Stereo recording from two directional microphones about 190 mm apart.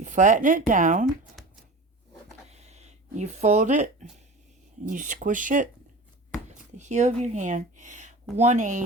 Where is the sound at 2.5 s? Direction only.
35° right (ahead or behind).